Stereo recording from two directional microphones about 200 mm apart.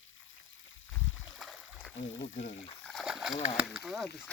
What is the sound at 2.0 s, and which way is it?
Speech, 70° left (ahead or behind).